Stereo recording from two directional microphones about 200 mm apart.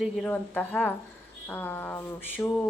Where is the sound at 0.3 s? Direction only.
10° left (ahead or behind).